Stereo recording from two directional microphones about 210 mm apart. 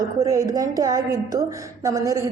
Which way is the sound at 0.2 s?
15° right (ahead or behind).